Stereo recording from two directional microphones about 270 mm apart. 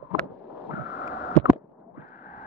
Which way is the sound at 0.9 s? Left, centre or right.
Left.